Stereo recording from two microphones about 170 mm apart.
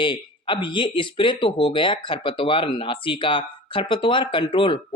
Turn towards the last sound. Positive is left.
turn(degrees=30)  # may be behind; listen again after turning